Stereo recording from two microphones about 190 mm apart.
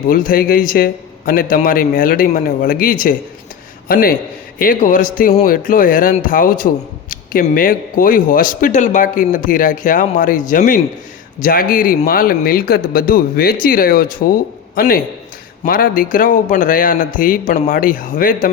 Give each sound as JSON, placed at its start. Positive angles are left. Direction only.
{"t": 0.1, "sound": "a man's voice", "side_deg": 50}